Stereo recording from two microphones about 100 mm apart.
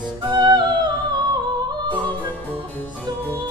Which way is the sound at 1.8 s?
15° left (ahead or behind).